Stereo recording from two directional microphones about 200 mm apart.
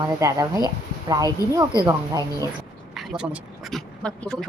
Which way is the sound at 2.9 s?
Centre (ahead or behind).